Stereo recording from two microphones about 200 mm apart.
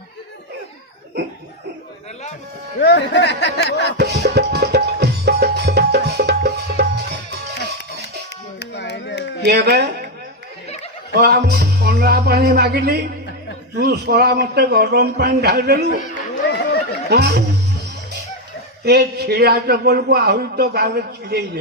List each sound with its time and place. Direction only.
2.8 s speech: 60° left (ahead or behind)
3.9 s music: 55° right (ahead or behind)
8.5 s a sound: 60° left (ahead or behind)
9.5 s speech: 55° right (ahead or behind)
11.1 s a man's voice: 55° right (ahead or behind)
16.5 s chatter: 60° left (ahead or behind)
17.1 s speech: 55° right (ahead or behind)
18.9 s a man's voice: 55° right (ahead or behind)